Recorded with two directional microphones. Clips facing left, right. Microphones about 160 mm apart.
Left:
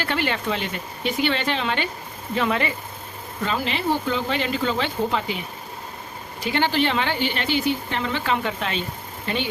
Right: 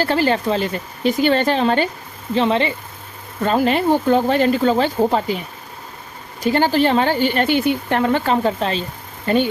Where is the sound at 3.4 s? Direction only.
50° right (ahead or behind).